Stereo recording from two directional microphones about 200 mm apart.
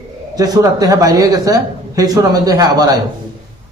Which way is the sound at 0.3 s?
20° right (ahead or behind).